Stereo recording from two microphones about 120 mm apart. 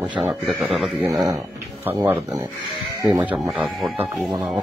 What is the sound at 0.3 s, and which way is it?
Speech, centre (ahead or behind).